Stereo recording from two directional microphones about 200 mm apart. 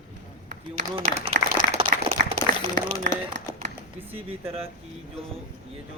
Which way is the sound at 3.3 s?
65° right (ahead or behind).